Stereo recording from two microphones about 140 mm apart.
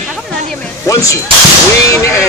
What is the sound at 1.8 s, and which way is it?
Speech, 20° left (ahead or behind).